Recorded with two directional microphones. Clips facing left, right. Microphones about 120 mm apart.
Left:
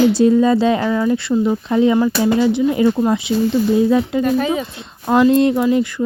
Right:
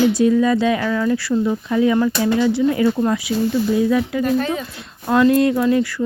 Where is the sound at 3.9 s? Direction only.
25° left (ahead or behind).